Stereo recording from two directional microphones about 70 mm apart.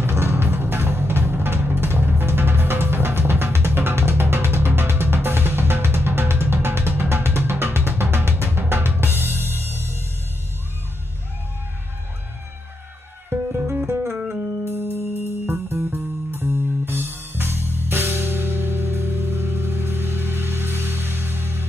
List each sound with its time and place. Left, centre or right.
0.0 s music: right
13.3 s music: right
15.4 s music: right